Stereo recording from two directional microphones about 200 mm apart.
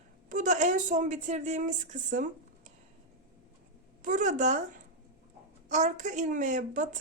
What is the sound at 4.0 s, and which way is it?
Speech, 40° right (ahead or behind).